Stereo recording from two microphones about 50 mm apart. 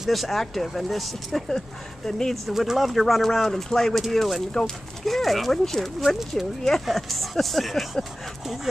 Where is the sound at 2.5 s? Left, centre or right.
Centre.